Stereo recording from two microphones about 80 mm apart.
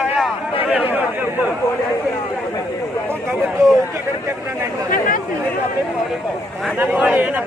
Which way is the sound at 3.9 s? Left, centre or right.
Right.